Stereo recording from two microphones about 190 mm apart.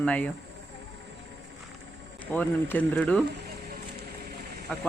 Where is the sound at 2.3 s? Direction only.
10° left (ahead or behind).